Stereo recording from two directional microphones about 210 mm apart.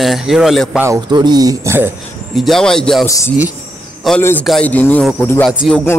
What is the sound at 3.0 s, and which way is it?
A man's voice, 15° left (ahead or behind).